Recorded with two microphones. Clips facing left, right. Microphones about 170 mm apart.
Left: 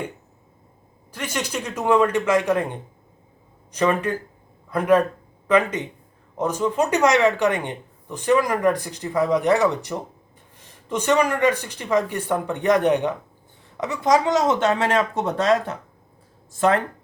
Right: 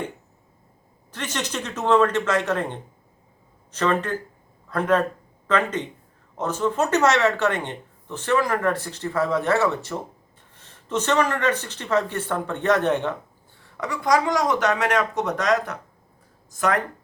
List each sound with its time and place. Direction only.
1.1 s speech: 10° left (ahead or behind); by 16.8 s 30° left (ahead or behind)